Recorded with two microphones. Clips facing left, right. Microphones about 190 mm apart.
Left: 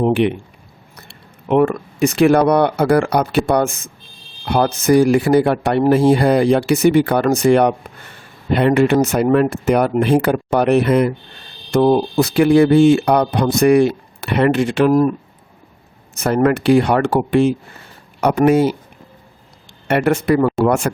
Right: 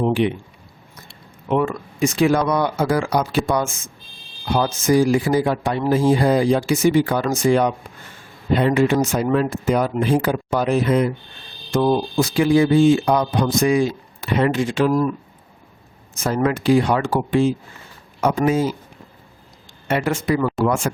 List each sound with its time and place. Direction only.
0.1 s speech: 65° left (ahead or behind)
16.1 s speech: 65° left (ahead or behind)
19.9 s speech: 60° left (ahead or behind)